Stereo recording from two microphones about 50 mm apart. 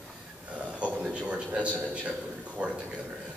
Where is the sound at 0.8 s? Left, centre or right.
Right.